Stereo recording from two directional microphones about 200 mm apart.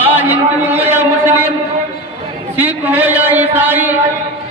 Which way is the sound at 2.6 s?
10° right (ahead or behind).